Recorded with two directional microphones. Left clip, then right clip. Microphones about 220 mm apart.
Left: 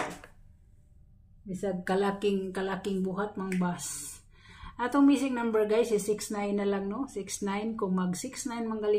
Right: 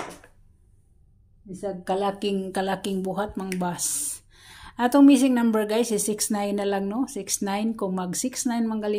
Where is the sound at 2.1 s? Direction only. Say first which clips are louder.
Right 3 dB; 45° right (ahead or behind).